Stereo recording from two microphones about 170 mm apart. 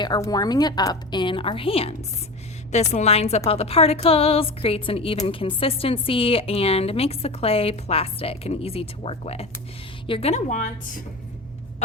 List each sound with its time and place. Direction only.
0.0 s a woman's voice: 25° left (ahead or behind); by 11.0 s 45° left (ahead or behind)